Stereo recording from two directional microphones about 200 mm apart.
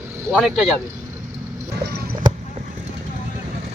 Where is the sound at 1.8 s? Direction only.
55° right (ahead or behind).